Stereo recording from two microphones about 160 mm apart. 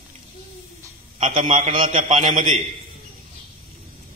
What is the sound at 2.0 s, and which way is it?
Speech, 50° right (ahead or behind).